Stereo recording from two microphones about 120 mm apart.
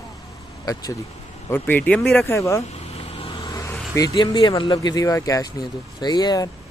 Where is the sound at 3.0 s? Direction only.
50° left (ahead or behind).